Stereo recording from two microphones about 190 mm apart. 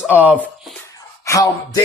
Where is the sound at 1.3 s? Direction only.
15° left (ahead or behind).